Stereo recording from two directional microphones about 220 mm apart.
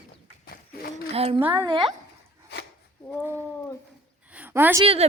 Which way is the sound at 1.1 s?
25° right (ahead or behind).